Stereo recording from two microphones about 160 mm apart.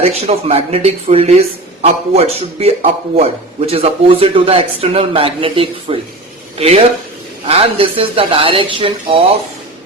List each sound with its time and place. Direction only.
0.0 s speech: 40° right (ahead or behind)